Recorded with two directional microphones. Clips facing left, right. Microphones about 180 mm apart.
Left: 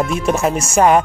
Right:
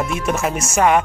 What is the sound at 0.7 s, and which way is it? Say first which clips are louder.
Speech: left 3 dB; 35° left (ahead or behind).